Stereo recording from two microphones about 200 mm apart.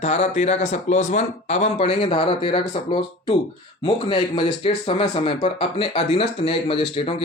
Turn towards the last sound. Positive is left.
turn(degrees=25)  # may be behind; listen again after turning